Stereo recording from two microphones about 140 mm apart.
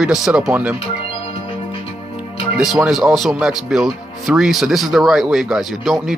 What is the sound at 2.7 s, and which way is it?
Speech, 5° right (ahead or behind).